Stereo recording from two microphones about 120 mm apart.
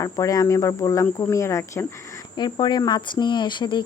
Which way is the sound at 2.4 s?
40° left (ahead or behind).